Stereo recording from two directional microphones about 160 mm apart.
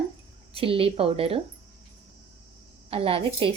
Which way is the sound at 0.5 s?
35° right (ahead or behind).